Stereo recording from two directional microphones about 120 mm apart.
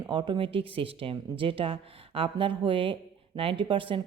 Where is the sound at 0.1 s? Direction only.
40° right (ahead or behind).